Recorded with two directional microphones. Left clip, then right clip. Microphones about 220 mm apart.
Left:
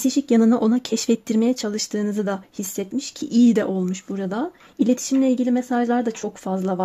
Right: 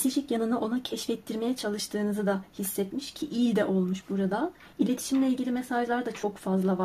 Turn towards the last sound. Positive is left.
turn(degrees=40)  # may be behind; listen again after turning